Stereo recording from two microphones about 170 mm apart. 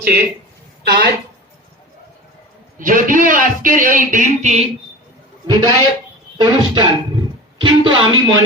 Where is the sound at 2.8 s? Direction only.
50° right (ahead or behind).